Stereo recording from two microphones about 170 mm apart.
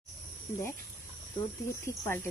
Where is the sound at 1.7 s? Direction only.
15° left (ahead or behind).